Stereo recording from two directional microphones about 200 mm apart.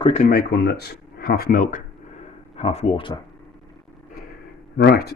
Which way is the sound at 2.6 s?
30° left (ahead or behind).